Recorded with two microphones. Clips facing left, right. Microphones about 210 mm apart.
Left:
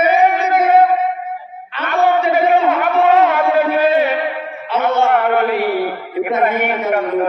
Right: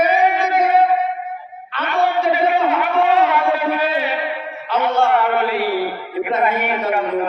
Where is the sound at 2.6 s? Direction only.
50° left (ahead or behind).